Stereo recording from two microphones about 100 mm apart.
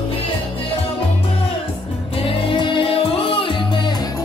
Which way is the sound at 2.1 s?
65° left (ahead or behind).